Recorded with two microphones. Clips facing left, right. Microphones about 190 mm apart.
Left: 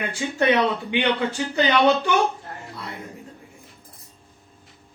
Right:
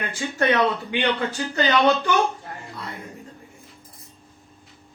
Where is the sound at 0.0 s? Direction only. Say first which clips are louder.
Left 2 dB; 15° left (ahead or behind).